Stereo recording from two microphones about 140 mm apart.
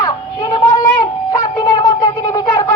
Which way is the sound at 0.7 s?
30° left (ahead or behind).